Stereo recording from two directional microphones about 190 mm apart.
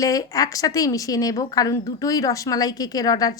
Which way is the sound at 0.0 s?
20° left (ahead or behind).